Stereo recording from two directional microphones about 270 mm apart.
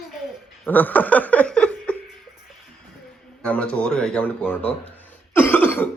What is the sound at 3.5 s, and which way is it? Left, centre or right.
Speech, centre.